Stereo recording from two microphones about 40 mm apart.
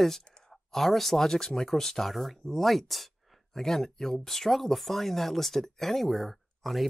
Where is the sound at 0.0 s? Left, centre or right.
Centre.